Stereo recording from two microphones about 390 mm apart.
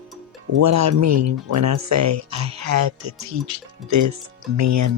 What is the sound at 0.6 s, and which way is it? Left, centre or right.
Speech, right.